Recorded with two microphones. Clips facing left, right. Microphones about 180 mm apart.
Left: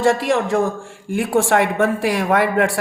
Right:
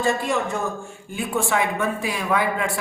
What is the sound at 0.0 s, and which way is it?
Speech, 90° left.